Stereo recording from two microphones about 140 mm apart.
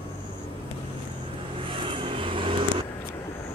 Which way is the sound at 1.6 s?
40° right (ahead or behind).